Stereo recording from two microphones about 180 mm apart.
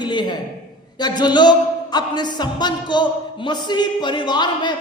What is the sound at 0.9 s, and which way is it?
Speech, 25° left (ahead or behind).